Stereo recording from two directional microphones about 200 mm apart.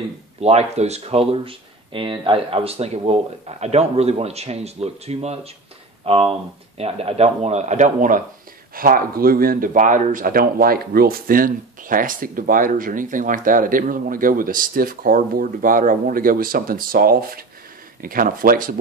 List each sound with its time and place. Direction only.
0.4 s speech: 30° right (ahead or behind)